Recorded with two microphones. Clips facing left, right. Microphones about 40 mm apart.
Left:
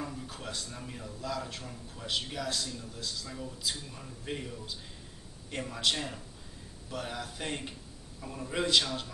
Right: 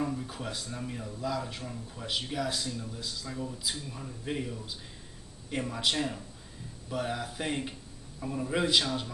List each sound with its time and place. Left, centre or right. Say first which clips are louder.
0.0 s a man's voice: right 6 dB; centre